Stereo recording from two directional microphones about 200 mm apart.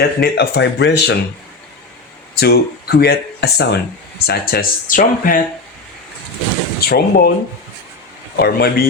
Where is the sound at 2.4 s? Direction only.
50° left (ahead or behind).